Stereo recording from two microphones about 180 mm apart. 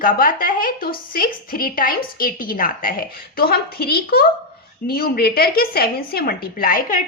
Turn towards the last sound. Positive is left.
turn(degrees=50)  # may be behind; listen again after turning